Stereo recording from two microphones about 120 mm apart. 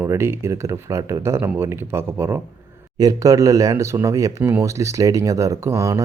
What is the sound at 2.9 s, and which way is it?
Speech, 30° right (ahead or behind).